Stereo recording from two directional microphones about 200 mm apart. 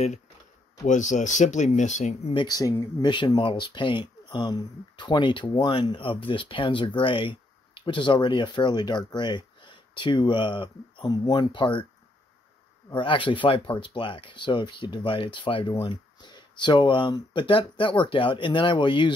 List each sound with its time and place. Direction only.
0.8 s speech: 40° left (ahead or behind)
2.3 s speech: 20° left (ahead or behind)
12.9 s speech: 25° left (ahead or behind)